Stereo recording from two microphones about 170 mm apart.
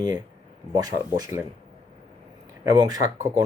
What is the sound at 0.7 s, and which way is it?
Speech, 20° right (ahead or behind).